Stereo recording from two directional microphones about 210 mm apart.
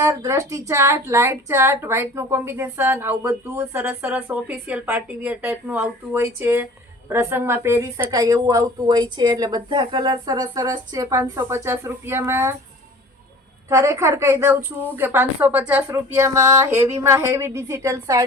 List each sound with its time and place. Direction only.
0.0 s a woman's voice: 15° right (ahead or behind)
13.7 s a woman's voice: 15° right (ahead or behind)